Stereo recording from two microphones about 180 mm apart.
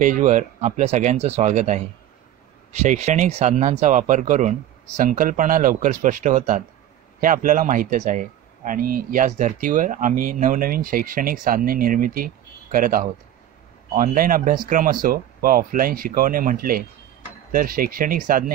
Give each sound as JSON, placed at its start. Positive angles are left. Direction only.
{"t": 0.0, "sound": "speech", "side_deg": -45}